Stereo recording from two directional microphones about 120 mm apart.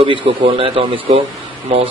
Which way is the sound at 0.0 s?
45° right (ahead or behind).